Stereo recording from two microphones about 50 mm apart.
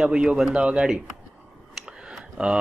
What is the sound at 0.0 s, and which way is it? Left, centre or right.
Speech, centre.